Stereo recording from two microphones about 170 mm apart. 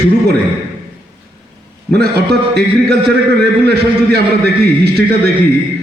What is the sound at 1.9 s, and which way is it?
Speech, 70° right (ahead or behind).